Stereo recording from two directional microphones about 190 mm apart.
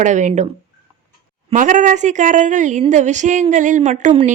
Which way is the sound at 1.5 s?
45° right (ahead or behind).